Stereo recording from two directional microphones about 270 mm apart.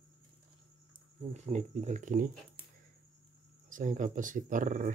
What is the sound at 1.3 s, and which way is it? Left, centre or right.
Speech, right.